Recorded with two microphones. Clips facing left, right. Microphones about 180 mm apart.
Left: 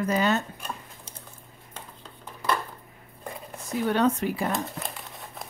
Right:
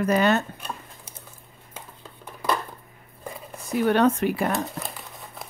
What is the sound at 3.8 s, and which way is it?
Speech, 65° right (ahead or behind).